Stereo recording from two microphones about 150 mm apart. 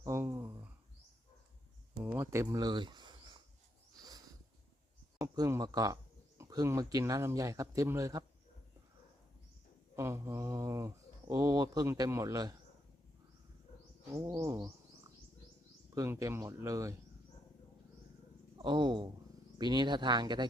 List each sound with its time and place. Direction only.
0.0 s a sound: 20° right (ahead or behind)
2.0 s a sound: 15° right (ahead or behind)
5.2 s speech: 20° right (ahead or behind)
9.9 s speech: 20° right (ahead or behind)
14.3 s speech: 20° right (ahead or behind)
16.0 s speech: 20° right (ahead or behind)
18.5 s speech: 30° right (ahead or behind)